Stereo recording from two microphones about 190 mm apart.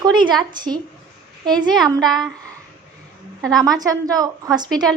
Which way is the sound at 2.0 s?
Centre (ahead or behind).